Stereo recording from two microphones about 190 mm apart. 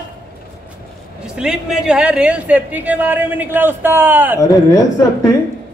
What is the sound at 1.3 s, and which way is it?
Speech, 5° right (ahead or behind).